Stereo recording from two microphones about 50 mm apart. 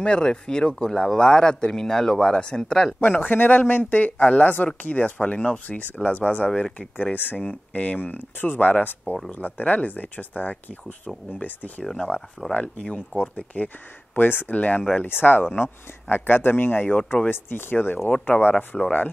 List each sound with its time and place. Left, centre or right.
0.0 s speech: centre
3.0 s speech: left
7.2 s speech: left
7.4 s speech: left
11.8 s speech: centre
12.5 s speech: left
14.1 s speech: left
14.5 s speech: left
15.0 s speech: left
18.7 s speech: centre